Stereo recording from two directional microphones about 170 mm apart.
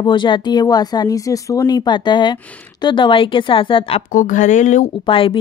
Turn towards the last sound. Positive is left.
turn(degrees=30)  # may be behind; listen again after turning